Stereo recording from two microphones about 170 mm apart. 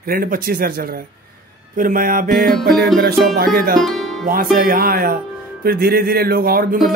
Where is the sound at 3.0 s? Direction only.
65° right (ahead or behind).